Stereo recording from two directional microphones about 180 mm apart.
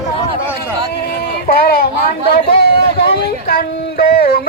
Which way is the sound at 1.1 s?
60° left (ahead or behind).